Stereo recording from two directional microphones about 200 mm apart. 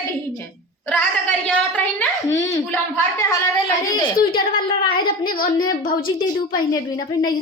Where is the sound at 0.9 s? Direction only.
5° left (ahead or behind).